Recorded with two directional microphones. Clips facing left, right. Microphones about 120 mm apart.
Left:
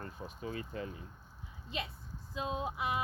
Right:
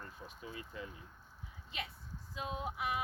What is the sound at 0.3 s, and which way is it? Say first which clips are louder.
Speech: left 9 dB; 45° left (ahead or behind).